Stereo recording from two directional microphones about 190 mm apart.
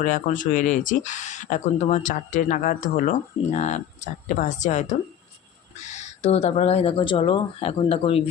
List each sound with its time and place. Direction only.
0.0 s speech: 45° left (ahead or behind)